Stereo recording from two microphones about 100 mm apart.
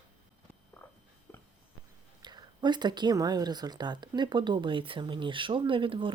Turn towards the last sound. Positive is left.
turn(degrees=-60)  # may be behind; listen again after turning